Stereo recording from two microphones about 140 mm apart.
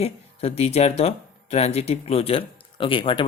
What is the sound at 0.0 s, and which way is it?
Speech, 45° left (ahead or behind).